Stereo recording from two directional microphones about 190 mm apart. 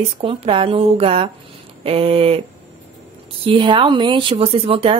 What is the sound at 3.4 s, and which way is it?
Speech, 25° right (ahead or behind).